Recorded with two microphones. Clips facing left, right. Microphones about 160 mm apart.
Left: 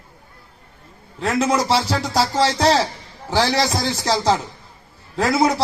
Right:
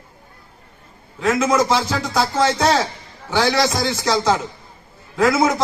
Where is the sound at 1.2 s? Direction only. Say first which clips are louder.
Right 2 dB; 35° left (ahead or behind).